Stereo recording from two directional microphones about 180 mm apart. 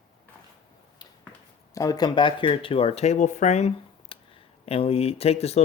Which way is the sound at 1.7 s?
20° left (ahead or behind).